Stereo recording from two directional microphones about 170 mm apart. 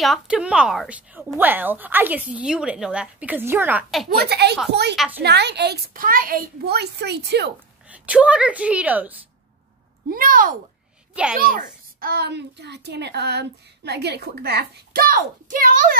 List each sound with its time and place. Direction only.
0.0 s a woman's voice: centre (ahead or behind)
4.2 s a child's voice: 75° right (ahead or behind)
4.9 s speech: 5° right (ahead or behind)
5.2 s a child's voice: 75° right (ahead or behind)
7.9 s a woman's voice: 10° right (ahead or behind)
10.0 s a child's voice: 55° right (ahead or behind)